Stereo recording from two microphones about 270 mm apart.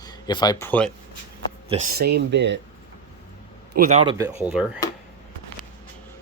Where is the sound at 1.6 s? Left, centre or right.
Right.